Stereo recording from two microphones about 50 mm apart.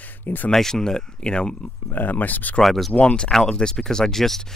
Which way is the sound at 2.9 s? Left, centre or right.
Left.